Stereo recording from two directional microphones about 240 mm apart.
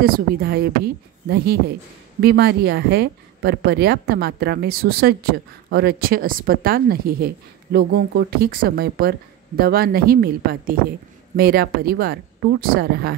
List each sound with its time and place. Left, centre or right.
0.0 s speech: right